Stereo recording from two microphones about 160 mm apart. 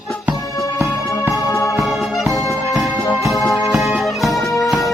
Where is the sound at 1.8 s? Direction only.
Centre (ahead or behind).